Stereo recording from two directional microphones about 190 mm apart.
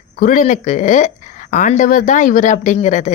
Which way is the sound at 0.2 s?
45° left (ahead or behind).